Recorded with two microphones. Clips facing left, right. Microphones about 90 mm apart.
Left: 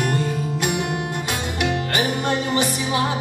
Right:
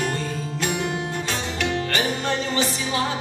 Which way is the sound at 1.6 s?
15° left (ahead or behind).